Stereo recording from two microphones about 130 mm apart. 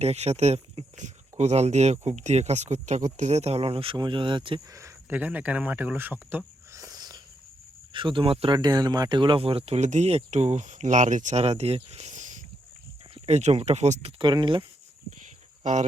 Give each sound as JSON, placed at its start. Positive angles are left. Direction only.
{"t": 0.0, "sound": "speech", "side_deg": -55}
{"t": 4.7, "sound": "speech", "side_deg": -20}
{"t": 7.9, "sound": "speech", "side_deg": -40}
{"t": 8.5, "sound": "speech", "side_deg": -30}
{"t": 13.1, "sound": "speech", "side_deg": -60}
{"t": 14.2, "sound": "speech", "side_deg": -35}
{"t": 15.6, "sound": "speech", "side_deg": -65}